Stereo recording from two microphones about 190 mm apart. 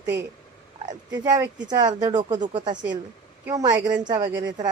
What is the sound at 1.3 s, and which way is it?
Speech, 20° right (ahead or behind).